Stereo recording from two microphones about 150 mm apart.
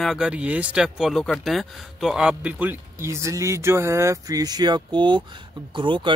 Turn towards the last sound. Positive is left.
turn(degrees=-35)  # may be behind; listen again after turning